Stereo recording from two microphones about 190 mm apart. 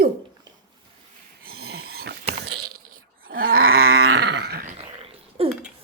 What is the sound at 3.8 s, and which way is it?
Growling, 90° right.